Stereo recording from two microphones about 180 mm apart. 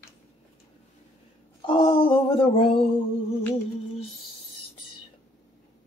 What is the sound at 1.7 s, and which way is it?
Speech, 30° left (ahead or behind).